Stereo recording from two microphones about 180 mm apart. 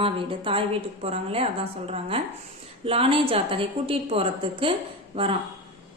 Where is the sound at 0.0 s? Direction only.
30° right (ahead or behind).